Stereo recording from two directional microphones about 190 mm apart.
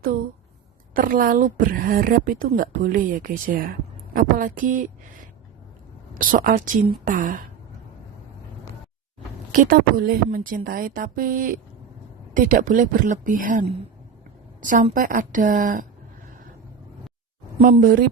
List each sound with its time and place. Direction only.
0.9 s speech: 45° right (ahead or behind)
9.5 s a woman's voice: 50° right (ahead or behind)
17.6 s speech: 40° right (ahead or behind)